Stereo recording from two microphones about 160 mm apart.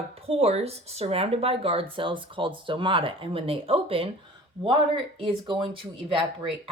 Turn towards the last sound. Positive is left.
turn(degrees=-30)  # may be behind; listen again after turning